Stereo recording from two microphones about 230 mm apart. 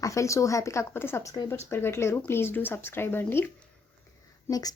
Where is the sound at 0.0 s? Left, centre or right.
Centre.